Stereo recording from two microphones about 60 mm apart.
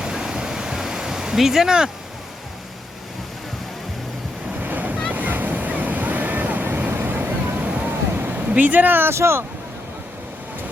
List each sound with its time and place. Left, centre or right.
0.0 s a sound: centre
4.6 s waves: right
7.9 s vehicle: right
9.1 s speech: right